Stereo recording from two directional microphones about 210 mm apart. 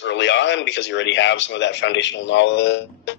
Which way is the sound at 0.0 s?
60° left (ahead or behind).